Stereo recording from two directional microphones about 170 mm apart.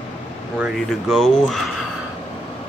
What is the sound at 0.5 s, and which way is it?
Speech, 5° right (ahead or behind).